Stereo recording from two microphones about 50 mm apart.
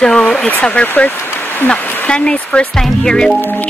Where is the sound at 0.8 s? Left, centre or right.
Left; by 3.3 s centre.